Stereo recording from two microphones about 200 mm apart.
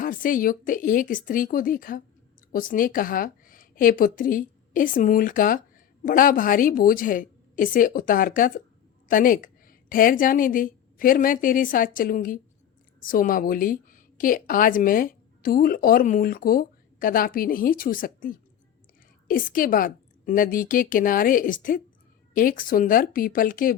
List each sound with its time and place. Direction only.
0.0 s a woman's voice: 45° left (ahead or behind)